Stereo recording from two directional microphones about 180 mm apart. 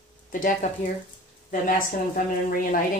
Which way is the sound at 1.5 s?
50° left (ahead or behind).